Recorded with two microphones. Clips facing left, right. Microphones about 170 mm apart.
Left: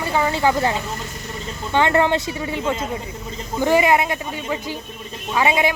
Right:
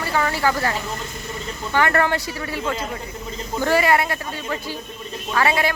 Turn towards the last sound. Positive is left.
turn(degrees=15)  # may be behind; listen again after turning